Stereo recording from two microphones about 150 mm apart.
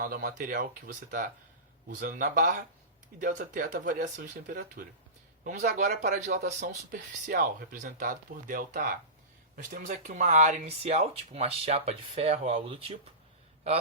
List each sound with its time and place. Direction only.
0.0 s speech: 75° right (ahead or behind); by 7.0 s 55° right (ahead or behind)
7.3 s speech: 80° right
9.6 s speech: 55° right (ahead or behind); by 13.0 s 40° right (ahead or behind)